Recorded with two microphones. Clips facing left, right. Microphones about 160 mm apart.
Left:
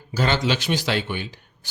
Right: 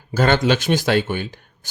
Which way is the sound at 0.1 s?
50° right (ahead or behind).